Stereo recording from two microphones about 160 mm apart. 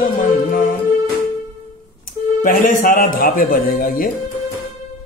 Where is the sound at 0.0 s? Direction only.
60° left (ahead or behind).